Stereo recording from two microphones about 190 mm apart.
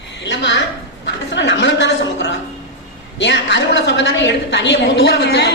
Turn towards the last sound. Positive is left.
turn(degrees=60)  # may be behind; listen again after turning